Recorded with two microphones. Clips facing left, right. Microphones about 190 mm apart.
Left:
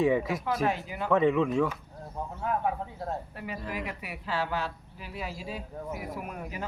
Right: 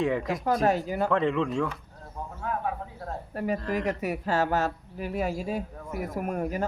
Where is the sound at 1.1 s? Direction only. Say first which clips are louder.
Left 4 dB; 5° left (ahead or behind).